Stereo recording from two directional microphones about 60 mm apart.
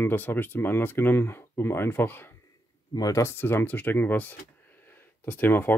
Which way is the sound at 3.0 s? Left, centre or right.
Left.